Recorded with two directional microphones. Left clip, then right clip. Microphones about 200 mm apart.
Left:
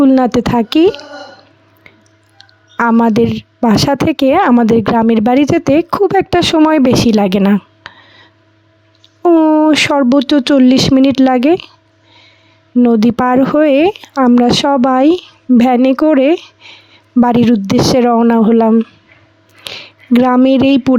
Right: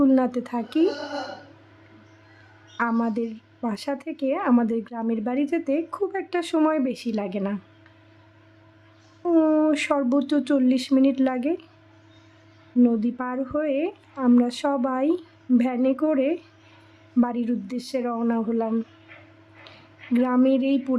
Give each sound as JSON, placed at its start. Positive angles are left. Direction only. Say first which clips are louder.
{"t": 0.0, "sound": "speech", "louder": "left 11 dB", "side_deg": 45}
{"t": 2.7, "sound": "speech", "louder": "left 14 dB", "side_deg": 50}
{"t": 9.2, "sound": "speech", "louder": "left 11 dB", "side_deg": 35}
{"t": 12.8, "sound": "speech", "louder": "left 13 dB", "side_deg": 50}
{"t": 19.7, "sound": "speech", "louder": "left 13 dB", "side_deg": 50}